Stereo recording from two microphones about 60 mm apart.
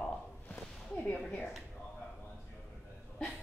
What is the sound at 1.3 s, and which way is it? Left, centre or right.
Speech, centre.